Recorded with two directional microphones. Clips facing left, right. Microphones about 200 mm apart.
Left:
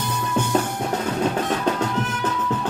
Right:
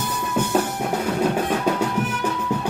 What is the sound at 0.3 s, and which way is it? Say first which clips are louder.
Music: right 1 dB; 10° right (ahead or behind).